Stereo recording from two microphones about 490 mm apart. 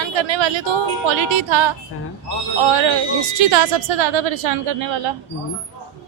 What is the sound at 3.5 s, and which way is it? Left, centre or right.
A woman's voice, right.